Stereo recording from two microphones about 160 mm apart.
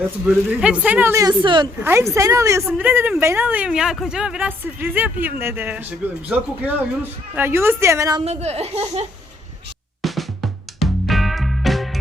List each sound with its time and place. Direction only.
0.6 s a woman's voice: 5° right (ahead or behind); by 1.6 s 30° right (ahead or behind)
1.8 s a woman's voice: 15° right (ahead or behind)
8.2 s speech: 45° right (ahead or behind)
10.0 s music: centre (ahead or behind)